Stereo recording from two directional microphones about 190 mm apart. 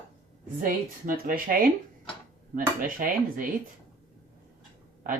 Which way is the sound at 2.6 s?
45° right (ahead or behind).